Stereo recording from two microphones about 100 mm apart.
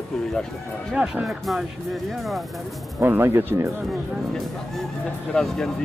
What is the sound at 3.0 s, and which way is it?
Speech, 25° right (ahead or behind).